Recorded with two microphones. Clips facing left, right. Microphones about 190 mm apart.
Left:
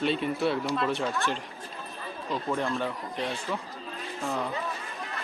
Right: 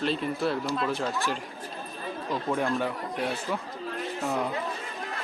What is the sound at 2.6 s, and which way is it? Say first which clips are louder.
Speech: right 2 dB; 10° right (ahead or behind).